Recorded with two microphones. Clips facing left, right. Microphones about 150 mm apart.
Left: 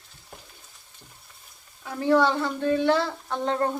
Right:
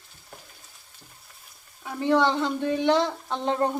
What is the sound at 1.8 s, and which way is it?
A woman's voice, 15° right (ahead or behind).